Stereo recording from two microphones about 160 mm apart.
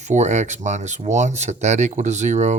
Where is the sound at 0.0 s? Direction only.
45° right (ahead or behind).